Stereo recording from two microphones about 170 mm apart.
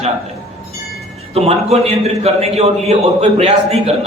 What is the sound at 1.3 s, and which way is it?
A man's voice, 40° right (ahead or behind).